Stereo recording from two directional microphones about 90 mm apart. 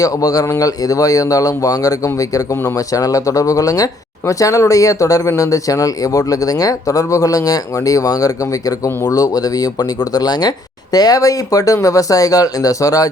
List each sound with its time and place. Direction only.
0.0 s speech: 40° left (ahead or behind)